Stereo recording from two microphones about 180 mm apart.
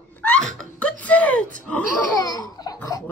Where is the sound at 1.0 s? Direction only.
5° left (ahead or behind).